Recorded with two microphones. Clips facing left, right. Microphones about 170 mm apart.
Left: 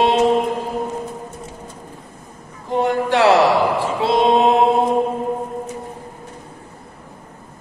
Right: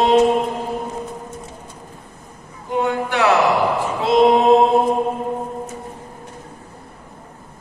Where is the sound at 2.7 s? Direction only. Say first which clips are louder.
Left 3 dB; 35° left (ahead or behind).